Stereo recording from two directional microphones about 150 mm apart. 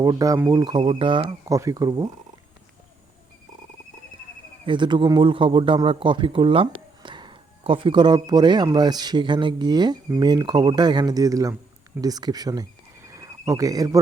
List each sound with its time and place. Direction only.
0.0 s speech: 25° right (ahead or behind)
0.6 s speech: 30° right (ahead or behind)
4.6 s a man's voice: 30° right (ahead or behind)
13.1 s a sound: 20° right (ahead or behind)